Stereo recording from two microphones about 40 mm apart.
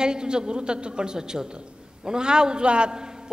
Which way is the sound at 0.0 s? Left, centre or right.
Centre.